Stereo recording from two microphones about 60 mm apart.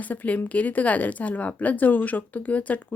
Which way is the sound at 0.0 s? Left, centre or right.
Left.